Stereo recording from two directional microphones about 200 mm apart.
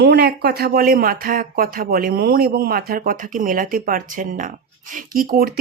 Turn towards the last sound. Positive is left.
turn(degrees=-45)  # may be behind; listen again after turning